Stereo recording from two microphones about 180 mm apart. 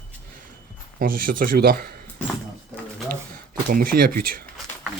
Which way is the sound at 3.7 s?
55° right (ahead or behind).